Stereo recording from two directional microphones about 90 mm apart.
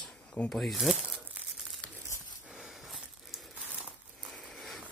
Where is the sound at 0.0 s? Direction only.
15° left (ahead or behind).